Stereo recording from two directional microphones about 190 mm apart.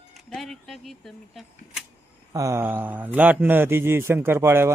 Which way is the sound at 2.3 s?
15° right (ahead or behind).